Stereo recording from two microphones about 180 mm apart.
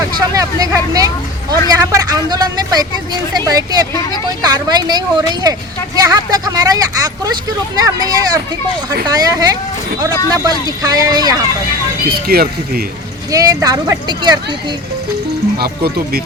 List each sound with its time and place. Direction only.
0.3 s a woman's voice: 20° right (ahead or behind)
12.0 s speech: 55° right (ahead or behind)
13.3 s a woman's voice: 20° right (ahead or behind)
15.5 s speech: 60° right (ahead or behind)